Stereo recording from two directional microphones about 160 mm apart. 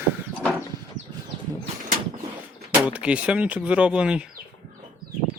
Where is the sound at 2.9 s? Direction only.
10° right (ahead or behind).